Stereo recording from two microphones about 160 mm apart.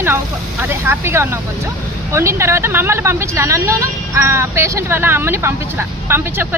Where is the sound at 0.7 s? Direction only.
15° right (ahead or behind).